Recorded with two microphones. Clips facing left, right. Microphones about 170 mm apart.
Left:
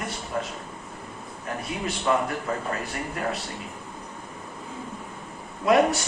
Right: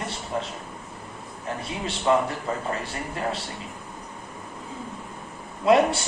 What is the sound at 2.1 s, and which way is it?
Speech, 25° right (ahead or behind).